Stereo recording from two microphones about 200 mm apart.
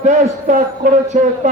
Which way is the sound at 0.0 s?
40° right (ahead or behind).